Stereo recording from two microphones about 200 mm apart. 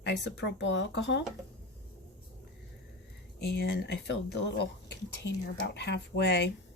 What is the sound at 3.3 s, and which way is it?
Speech, 55° left (ahead or behind).